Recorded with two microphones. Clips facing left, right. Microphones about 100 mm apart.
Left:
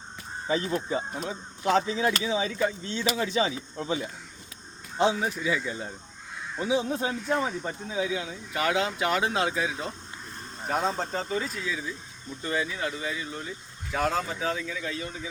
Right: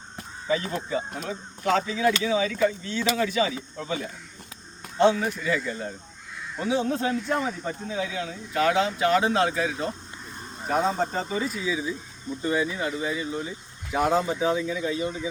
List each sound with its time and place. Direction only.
0.4 s speech: 30° left (ahead or behind)
4.9 s speech: 15° left (ahead or behind); by 15.1 s 20° right (ahead or behind)